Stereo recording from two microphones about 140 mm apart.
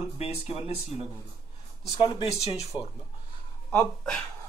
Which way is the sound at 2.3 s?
50° left (ahead or behind).